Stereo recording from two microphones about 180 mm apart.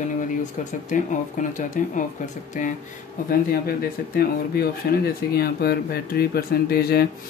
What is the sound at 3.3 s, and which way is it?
Speech, 55° left (ahead or behind).